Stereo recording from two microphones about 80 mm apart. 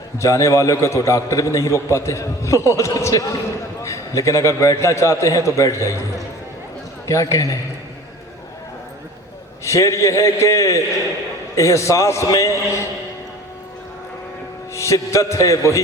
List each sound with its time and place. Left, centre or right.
0.2 s a man's voice: left
9.6 s a man's voice: left
14.7 s a man's voice: left